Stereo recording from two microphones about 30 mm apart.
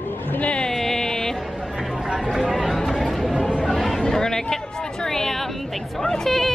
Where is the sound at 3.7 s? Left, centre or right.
Centre.